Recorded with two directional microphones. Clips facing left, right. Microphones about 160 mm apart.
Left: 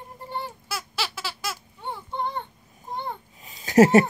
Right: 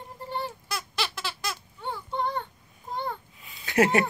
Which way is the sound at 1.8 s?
20° left (ahead or behind).